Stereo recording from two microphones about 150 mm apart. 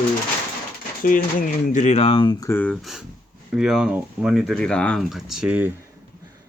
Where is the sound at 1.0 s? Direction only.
65° left (ahead or behind); by 2.6 s 25° left (ahead or behind).